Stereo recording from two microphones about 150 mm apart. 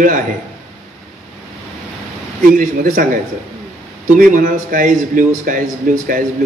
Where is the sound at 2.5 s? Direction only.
65° right (ahead or behind).